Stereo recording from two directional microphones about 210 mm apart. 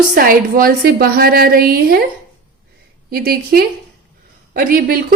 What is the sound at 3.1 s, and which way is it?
A woman's voice, 45° right (ahead or behind).